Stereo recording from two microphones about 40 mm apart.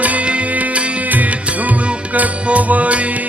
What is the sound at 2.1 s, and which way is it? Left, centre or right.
Music, right.